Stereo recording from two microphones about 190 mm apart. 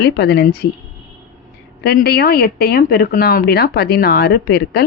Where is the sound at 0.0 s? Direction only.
60° left (ahead or behind).